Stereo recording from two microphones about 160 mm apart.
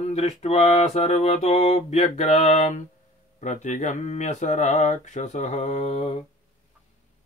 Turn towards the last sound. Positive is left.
turn(degrees=45)  # may be behind; listen again after turning